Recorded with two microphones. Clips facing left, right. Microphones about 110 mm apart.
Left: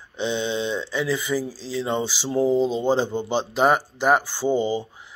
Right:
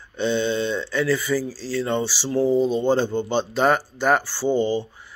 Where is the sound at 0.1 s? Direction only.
15° left (ahead or behind).